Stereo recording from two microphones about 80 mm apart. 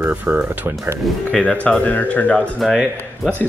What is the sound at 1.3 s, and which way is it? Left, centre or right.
Speech, centre.